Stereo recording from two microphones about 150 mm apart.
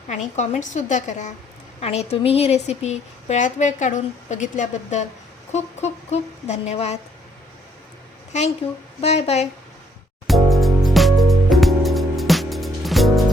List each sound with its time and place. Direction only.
0.1 s a woman's voice: 55° left (ahead or behind)
8.3 s a woman's voice: 50° left (ahead or behind)
10.2 s music: centre (ahead or behind)